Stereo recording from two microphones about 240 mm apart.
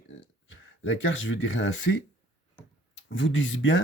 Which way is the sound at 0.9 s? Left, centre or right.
Left.